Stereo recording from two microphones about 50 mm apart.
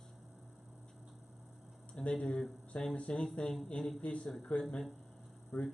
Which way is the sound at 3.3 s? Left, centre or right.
Centre.